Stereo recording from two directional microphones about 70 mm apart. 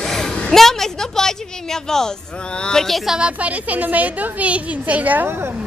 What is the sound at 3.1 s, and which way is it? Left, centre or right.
A woman's voice, centre.